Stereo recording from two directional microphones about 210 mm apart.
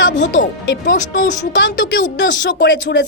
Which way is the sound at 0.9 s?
40° left (ahead or behind).